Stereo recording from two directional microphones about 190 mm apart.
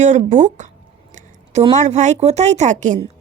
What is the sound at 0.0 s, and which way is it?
Speech, 40° right (ahead or behind).